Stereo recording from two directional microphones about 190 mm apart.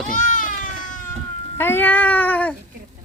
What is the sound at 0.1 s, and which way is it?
Baby cry, 45° left (ahead or behind).